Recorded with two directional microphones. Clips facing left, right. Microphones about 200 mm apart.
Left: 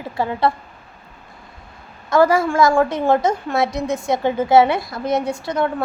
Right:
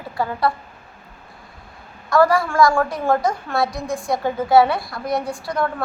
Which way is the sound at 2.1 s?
20° left (ahead or behind).